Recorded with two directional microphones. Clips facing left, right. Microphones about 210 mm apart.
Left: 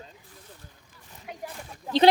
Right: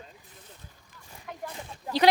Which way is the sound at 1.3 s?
10° left (ahead or behind).